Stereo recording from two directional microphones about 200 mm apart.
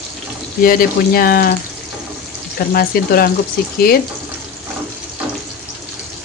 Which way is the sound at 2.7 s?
50° left (ahead or behind).